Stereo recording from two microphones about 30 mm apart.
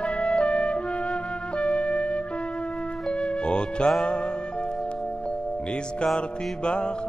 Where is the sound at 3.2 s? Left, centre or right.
Left.